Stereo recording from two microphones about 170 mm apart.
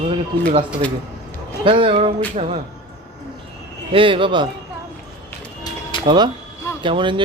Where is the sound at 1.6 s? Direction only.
30° right (ahead or behind).